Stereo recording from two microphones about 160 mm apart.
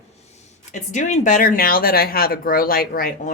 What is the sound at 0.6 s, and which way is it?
Speech, 50° left (ahead or behind).